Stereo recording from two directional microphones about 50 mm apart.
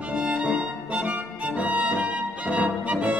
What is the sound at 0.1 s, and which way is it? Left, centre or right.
Music, right.